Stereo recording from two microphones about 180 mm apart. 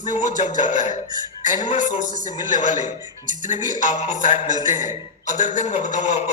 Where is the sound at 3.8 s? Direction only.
40° left (ahead or behind).